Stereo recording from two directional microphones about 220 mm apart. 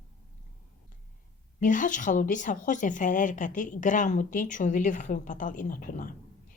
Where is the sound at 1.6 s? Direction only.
35° left (ahead or behind).